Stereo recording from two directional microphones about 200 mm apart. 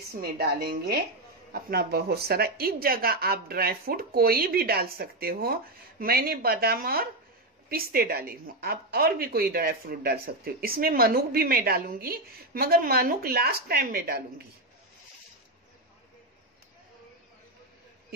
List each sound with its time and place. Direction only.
0.2 s a woman's voice: 50° right (ahead or behind)